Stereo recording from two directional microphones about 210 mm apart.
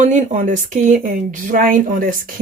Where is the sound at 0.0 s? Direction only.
35° right (ahead or behind).